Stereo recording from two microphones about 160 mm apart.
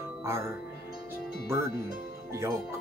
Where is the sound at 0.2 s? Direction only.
20° right (ahead or behind).